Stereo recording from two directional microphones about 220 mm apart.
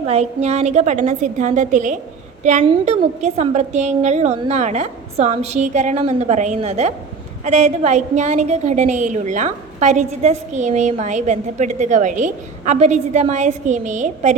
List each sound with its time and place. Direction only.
0.0 s a woman's voice: 30° right (ahead or behind)